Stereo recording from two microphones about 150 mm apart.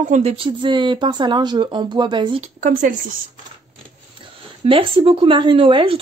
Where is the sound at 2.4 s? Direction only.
60° right (ahead or behind).